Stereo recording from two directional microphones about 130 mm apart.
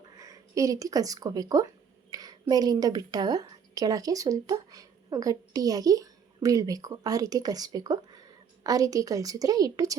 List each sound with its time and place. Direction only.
0.2 s a woman's voice: 25° right (ahead or behind)